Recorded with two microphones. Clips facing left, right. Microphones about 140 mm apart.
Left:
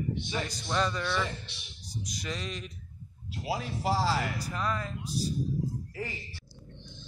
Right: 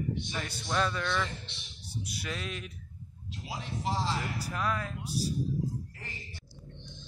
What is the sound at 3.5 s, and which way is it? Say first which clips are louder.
Speech: left 5 dB; 65° left (ahead or behind).